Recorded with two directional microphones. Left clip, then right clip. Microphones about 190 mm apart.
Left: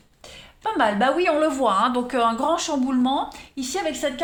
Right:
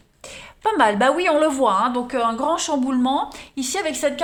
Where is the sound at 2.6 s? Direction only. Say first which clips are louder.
Right 2 dB; 25° right (ahead or behind); by 4.2 s 50° right (ahead or behind).